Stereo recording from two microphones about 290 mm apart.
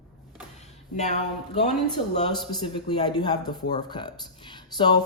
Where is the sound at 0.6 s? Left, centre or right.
Left.